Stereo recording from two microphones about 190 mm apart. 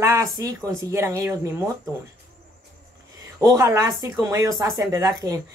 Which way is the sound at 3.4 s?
20° right (ahead or behind).